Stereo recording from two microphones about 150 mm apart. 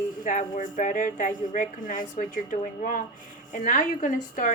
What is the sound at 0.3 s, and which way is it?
Speech, 60° left (ahead or behind).